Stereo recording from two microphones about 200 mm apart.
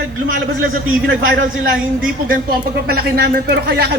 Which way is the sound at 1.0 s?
75° right (ahead or behind).